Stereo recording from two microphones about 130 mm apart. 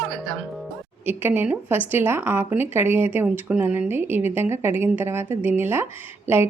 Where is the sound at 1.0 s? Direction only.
15° right (ahead or behind).